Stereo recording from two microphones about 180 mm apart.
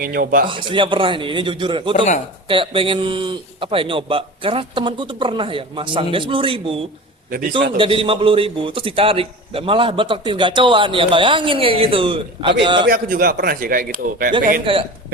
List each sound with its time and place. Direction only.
0.0 s speech: 55° right (ahead or behind)
0.4 s a man's voice: 30° right (ahead or behind)
7.3 s a man's voice: 55° right (ahead or behind)
7.8 s a man's voice: 30° right (ahead or behind)
12.8 s speech: 55° right (ahead or behind)
14.6 s a man's voice: 30° right (ahead or behind)